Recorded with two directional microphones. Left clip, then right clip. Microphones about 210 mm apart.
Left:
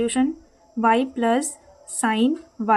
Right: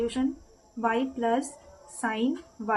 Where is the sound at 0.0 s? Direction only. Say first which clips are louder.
Left 6 dB; 45° left (ahead or behind).